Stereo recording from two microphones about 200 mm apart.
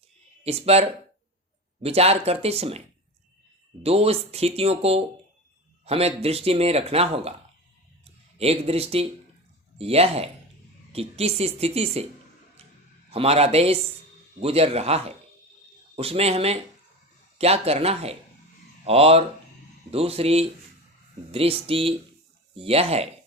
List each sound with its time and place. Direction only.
0.4 s speech: 30° right (ahead or behind)
3.8 s speech: 30° right (ahead or behind)
8.4 s speech: 30° right (ahead or behind)
12.6 s a sound: 30° right (ahead or behind)
13.1 s speech: 30° right (ahead or behind)